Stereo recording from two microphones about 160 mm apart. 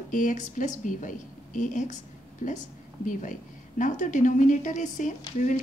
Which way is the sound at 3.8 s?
50° left (ahead or behind).